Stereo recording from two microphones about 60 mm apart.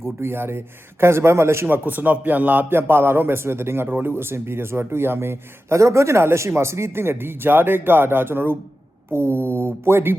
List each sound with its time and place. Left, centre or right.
0.2 s speech: right
1.6 s speech: right